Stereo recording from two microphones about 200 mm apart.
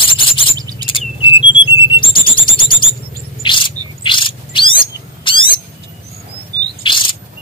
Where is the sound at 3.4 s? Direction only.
25° left (ahead or behind).